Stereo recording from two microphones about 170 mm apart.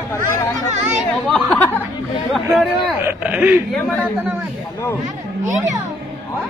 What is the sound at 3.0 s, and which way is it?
Speech, 10° right (ahead or behind).